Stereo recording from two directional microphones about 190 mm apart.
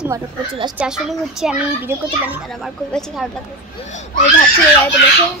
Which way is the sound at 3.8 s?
40° left (ahead or behind).